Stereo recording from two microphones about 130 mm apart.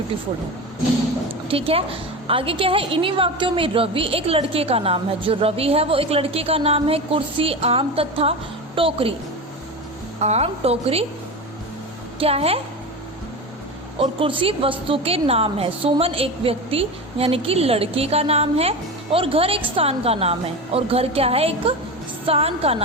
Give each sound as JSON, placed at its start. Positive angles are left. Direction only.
{"t": 1.5, "sound": "a woman's voice", "side_deg": -45}
{"t": 10.2, "sound": "a woman's voice", "side_deg": -55}
{"t": 12.2, "sound": "a woman's voice", "side_deg": -50}
{"t": 14.0, "sound": "a woman's voice", "side_deg": -45}